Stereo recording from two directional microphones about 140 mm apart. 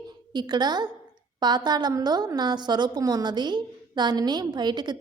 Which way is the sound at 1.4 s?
30° right (ahead or behind).